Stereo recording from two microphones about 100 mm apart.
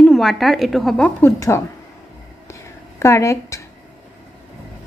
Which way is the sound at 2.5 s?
30° left (ahead or behind).